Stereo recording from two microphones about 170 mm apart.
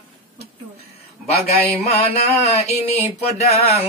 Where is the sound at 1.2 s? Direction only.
35° left (ahead or behind).